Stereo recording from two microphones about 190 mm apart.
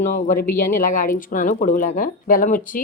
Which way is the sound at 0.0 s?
45° left (ahead or behind).